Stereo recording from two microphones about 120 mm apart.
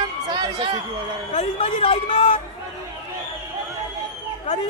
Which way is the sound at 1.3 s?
50° left (ahead or behind).